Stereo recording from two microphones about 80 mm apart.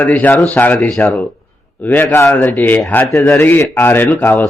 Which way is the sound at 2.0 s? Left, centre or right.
Left.